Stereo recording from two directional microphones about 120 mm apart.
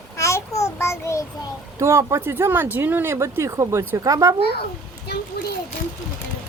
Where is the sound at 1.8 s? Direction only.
25° right (ahead or behind).